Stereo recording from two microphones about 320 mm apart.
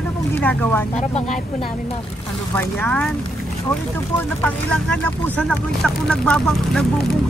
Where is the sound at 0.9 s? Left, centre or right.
Centre.